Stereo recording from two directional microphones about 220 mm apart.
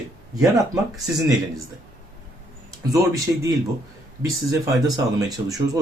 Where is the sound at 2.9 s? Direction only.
15° right (ahead or behind).